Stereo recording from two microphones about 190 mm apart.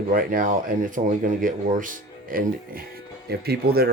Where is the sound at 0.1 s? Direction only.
45° right (ahead or behind).